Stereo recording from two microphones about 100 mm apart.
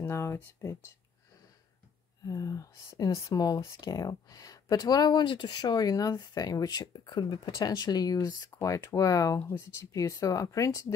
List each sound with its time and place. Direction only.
0.0 s speech: 25° left (ahead or behind)
2.2 s speech: 35° left (ahead or behind)